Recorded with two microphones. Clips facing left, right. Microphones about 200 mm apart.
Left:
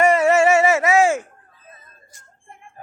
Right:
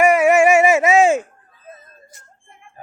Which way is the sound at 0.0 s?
10° right (ahead or behind).